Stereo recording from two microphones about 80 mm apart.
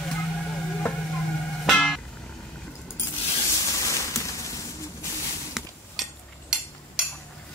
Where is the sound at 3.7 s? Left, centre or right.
Left.